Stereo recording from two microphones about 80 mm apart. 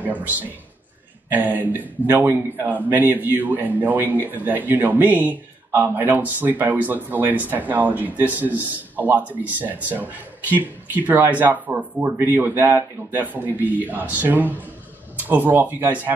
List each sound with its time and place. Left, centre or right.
0.0 s speech: right